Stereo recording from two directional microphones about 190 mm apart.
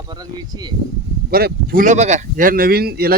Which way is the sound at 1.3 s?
55° right (ahead or behind).